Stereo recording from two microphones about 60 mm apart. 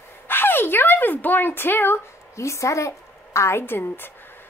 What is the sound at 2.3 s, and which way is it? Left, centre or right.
A woman's voice, left.